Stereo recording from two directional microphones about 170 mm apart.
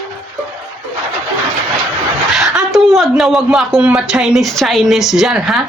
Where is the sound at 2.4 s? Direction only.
5° right (ahead or behind).